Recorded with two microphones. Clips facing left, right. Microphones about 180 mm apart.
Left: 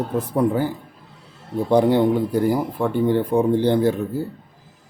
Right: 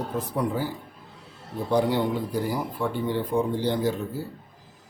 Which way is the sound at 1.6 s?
60° left (ahead or behind).